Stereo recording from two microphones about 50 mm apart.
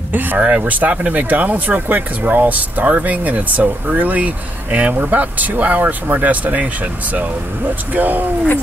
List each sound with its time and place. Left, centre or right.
0.1 s speech: right
7.9 s speech: right